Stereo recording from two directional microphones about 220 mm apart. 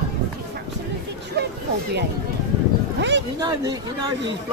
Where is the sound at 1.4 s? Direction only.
50° right (ahead or behind).